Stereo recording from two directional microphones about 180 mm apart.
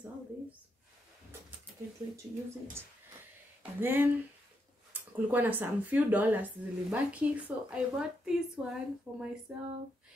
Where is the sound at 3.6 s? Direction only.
10° right (ahead or behind).